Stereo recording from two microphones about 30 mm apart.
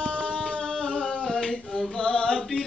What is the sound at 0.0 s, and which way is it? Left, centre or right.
Music, left.